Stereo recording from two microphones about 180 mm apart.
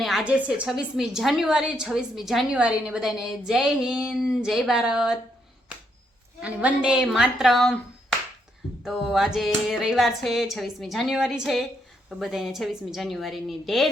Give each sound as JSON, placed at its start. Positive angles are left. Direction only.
{"t": 0.0, "sound": "a woman's voice", "side_deg": 0}
{"t": 6.4, "sound": "a woman's voice", "side_deg": -5}
{"t": 8.8, "sound": "a woman's voice", "side_deg": 0}